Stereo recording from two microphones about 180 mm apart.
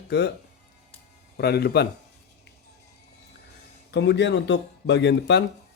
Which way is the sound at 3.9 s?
75° left (ahead or behind).